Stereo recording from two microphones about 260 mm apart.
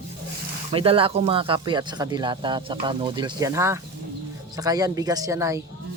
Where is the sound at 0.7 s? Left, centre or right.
Right.